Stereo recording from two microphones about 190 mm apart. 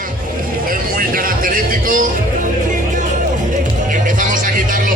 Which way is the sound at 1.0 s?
45° right (ahead or behind).